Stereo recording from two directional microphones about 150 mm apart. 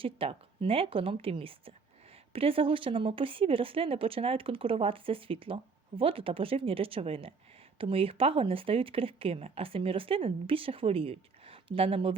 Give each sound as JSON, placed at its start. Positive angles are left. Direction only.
{"t": 0.0, "sound": "a woman's voice", "side_deg": -40}